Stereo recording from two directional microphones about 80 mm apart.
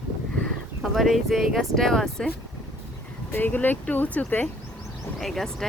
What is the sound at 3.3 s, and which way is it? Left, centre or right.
Speech, left.